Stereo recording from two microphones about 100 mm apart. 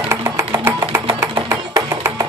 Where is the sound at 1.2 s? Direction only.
25° right (ahead or behind).